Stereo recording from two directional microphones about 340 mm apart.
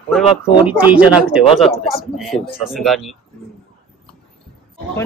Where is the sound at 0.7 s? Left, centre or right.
Centre.